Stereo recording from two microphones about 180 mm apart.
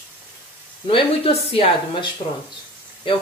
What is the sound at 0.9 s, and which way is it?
Speech, 30° left (ahead or behind).